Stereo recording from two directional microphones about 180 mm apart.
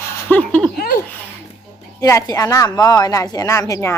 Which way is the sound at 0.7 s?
60° left (ahead or behind).